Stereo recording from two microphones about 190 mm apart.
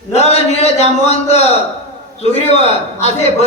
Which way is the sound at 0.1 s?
35° left (ahead or behind).